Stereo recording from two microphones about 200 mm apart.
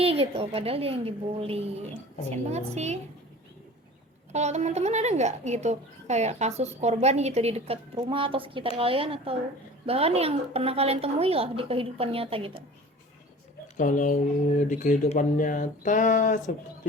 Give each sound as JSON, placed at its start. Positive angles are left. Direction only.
{"t": 0.0, "sound": "a woman's voice", "side_deg": -30}
{"t": 4.3, "sound": "a woman's voice", "side_deg": -35}
{"t": 13.7, "sound": "speech", "side_deg": 40}